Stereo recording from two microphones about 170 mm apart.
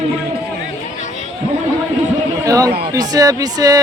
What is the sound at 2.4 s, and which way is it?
Speech, 20° right (ahead or behind).